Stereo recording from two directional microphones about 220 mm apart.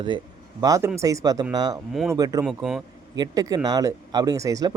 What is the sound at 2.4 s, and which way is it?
Speech, 5° right (ahead or behind).